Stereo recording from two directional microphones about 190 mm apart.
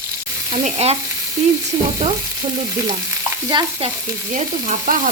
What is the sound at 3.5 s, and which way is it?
Stir, 25° right (ahead or behind).